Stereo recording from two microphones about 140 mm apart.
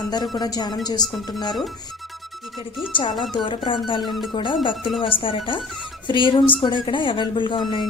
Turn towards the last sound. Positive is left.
turn(degrees=35)  # may be behind; listen again after turning